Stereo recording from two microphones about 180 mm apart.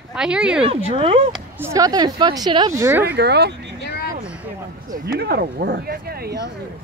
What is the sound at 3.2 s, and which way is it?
Speech, 65° right (ahead or behind).